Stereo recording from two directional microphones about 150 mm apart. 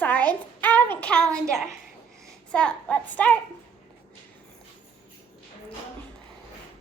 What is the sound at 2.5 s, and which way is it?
Speech, 10° left (ahead or behind).